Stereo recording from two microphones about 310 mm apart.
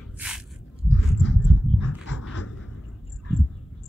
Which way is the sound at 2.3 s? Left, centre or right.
Left.